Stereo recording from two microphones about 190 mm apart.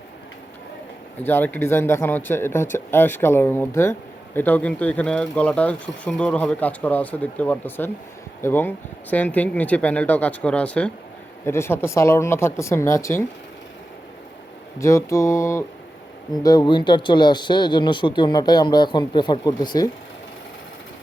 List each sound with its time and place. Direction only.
1.2 s speech: 10° left (ahead or behind)
14.8 s speech: 15° left (ahead or behind)